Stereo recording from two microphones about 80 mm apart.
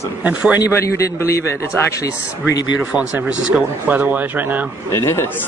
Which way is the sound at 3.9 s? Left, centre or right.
Centre.